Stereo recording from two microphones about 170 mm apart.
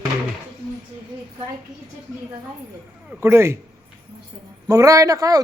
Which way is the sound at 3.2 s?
15° right (ahead or behind).